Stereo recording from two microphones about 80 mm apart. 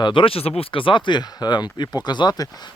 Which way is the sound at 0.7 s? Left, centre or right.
Left.